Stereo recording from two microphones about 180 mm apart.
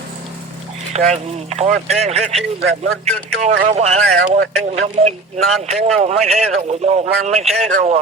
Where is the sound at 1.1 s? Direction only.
35° right (ahead or behind).